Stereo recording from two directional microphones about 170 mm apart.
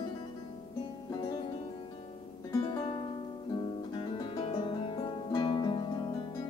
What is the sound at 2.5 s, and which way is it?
Music, 20° left (ahead or behind).